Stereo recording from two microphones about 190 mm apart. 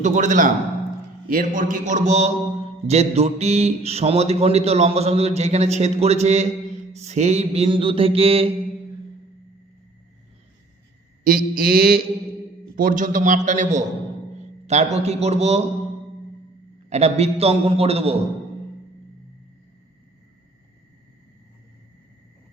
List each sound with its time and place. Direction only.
0.0 s a man's voice: 40° right (ahead or behind)
11.2 s mantra: 45° right (ahead or behind)
12.7 s a man's voice: 45° right (ahead or behind)
14.3 s a sound: 35° right (ahead or behind)
14.9 s a man's voice: 35° right (ahead or behind)
16.9 s a man's voice: 35° right (ahead or behind)